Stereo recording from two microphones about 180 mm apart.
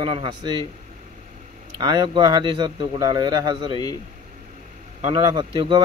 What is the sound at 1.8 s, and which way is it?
Speech, 25° right (ahead or behind).